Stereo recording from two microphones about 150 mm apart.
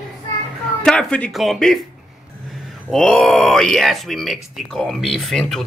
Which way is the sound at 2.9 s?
5° left (ahead or behind).